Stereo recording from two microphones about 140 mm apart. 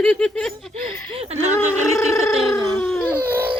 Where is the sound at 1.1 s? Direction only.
45° right (ahead or behind).